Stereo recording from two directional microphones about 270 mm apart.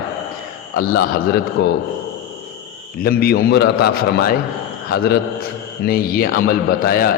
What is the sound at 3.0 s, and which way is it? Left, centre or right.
A man's voice, left.